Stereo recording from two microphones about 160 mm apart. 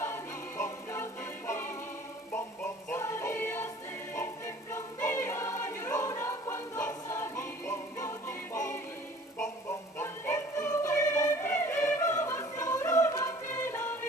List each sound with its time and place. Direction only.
0.0 s music: 15° left (ahead or behind)
2.3 s music: 15° left (ahead or behind)
4.7 s choir: 20° left (ahead or behind)
9.7 s music: 15° left (ahead or behind)